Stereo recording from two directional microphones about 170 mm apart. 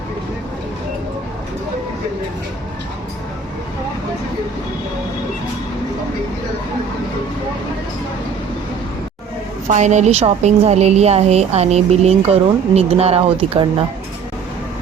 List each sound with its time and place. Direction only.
9.6 s a woman's voice: 45° right (ahead or behind)